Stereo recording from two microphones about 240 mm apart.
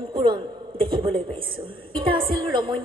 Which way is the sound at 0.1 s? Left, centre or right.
Right.